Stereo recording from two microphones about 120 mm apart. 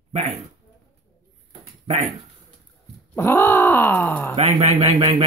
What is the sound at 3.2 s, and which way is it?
Speech, 20° left (ahead or behind).